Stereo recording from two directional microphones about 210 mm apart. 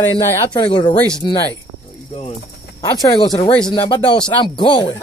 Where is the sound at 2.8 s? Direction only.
20° left (ahead or behind).